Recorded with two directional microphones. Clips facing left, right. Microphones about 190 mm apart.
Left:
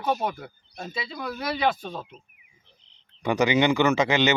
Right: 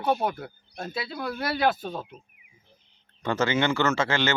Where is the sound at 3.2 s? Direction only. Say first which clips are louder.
Left 3 dB; 15° left (ahead or behind).